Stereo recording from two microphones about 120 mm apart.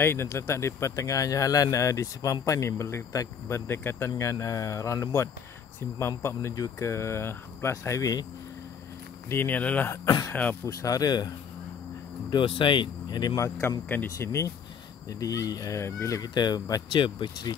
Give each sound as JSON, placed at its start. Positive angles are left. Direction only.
{"t": 0.0, "sound": "speech", "side_deg": 20}
{"t": 9.3, "sound": "speech", "side_deg": 15}
{"t": 10.0, "sound": "speech", "side_deg": 30}
{"t": 10.3, "sound": "speech", "side_deg": 10}
{"t": 10.6, "sound": "speech", "side_deg": 30}
{"t": 12.3, "sound": "speech", "side_deg": 45}
{"t": 13.4, "sound": "speech", "side_deg": 20}
{"t": 16.2, "sound": "speech", "side_deg": 35}